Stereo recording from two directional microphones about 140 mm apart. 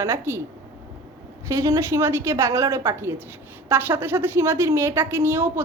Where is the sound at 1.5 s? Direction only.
25° right (ahead or behind).